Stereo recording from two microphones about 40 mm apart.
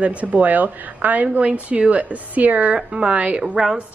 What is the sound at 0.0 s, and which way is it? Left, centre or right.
A woman's voice, right.